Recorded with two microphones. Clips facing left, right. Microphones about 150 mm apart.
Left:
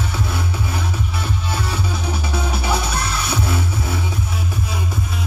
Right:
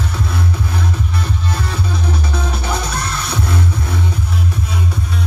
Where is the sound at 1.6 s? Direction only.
5° left (ahead or behind).